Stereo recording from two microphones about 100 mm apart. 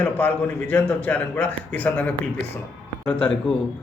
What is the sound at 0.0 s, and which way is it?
A man's voice, 15° left (ahead or behind).